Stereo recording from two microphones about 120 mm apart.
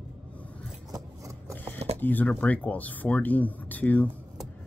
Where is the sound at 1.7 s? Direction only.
60° right (ahead or behind).